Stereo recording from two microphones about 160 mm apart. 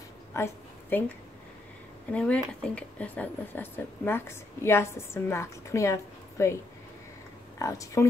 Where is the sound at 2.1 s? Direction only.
5° left (ahead or behind).